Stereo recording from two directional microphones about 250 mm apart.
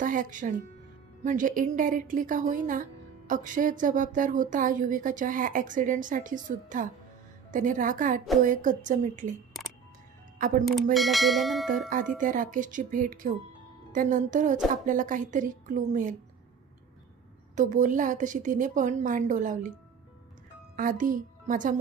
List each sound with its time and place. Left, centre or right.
0.0 s speech: right
10.9 s speech: centre
12.2 s speech: right
17.6 s speech: right
20.7 s a woman's voice: right